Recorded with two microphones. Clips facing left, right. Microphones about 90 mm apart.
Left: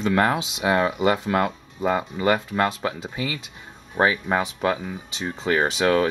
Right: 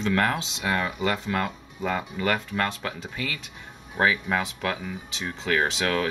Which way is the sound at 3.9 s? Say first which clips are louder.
Left 3 dB; 20° left (ahead or behind).